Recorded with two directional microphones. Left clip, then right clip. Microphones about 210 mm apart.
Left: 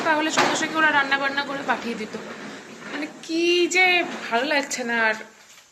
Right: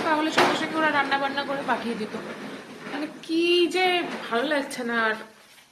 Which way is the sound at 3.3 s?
10° right (ahead or behind).